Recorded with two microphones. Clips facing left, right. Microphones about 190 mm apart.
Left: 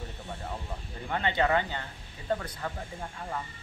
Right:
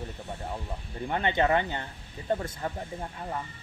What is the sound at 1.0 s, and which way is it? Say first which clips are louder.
Speech: right 2 dB; 20° right (ahead or behind).